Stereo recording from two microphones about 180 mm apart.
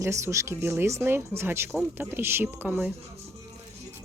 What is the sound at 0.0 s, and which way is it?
A woman's voice, 15° right (ahead or behind).